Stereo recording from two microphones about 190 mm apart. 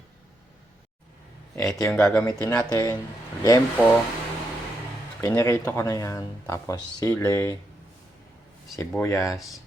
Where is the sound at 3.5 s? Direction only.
10° left (ahead or behind).